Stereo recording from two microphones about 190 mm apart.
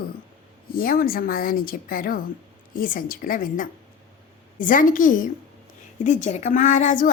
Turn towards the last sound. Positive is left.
turn(degrees=40)  # may be behind; listen again after turning